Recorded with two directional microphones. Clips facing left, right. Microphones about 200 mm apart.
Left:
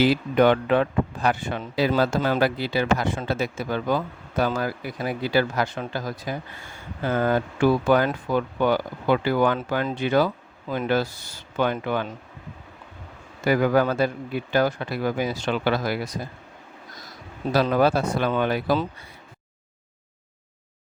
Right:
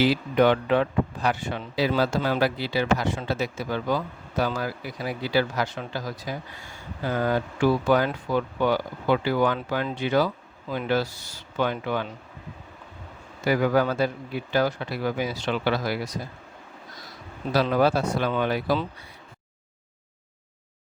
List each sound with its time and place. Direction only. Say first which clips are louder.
0.0 s a man's voice: left 2 dB; 50° left (ahead or behind)
13.4 s a man's voice: left 2 dB; 50° left (ahead or behind)
17.5 s a man's voice: left 1 dB; 50° left (ahead or behind)